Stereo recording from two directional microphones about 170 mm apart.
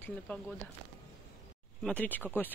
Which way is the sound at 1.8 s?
10° left (ahead or behind).